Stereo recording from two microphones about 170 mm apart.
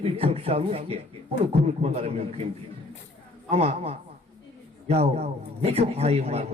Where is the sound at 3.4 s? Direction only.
35° right (ahead or behind).